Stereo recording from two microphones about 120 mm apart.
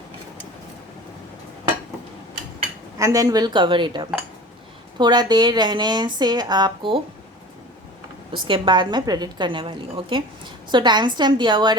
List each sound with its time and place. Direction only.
3.0 s speech: 30° right (ahead or behind)
8.4 s speech: 45° right (ahead or behind)